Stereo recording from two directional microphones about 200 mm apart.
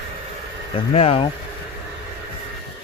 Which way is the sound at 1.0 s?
30° left (ahead or behind).